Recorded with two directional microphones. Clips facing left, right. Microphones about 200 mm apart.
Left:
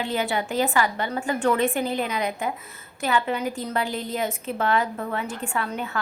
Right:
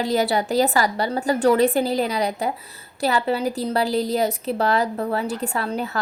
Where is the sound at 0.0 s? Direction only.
40° right (ahead or behind).